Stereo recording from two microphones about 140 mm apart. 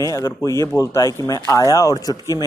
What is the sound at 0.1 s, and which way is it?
Speech, 20° left (ahead or behind).